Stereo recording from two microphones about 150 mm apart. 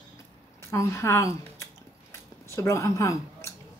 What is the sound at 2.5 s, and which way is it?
Speech, 20° left (ahead or behind).